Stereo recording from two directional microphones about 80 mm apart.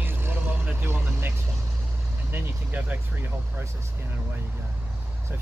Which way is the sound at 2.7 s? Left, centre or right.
Centre.